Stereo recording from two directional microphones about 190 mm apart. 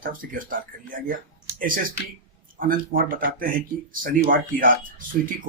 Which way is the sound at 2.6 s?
45° right (ahead or behind).